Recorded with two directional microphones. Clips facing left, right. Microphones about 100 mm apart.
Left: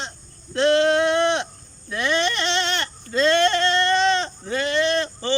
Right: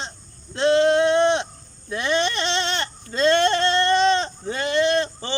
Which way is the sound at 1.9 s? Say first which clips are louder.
Even; 25° right (ahead or behind).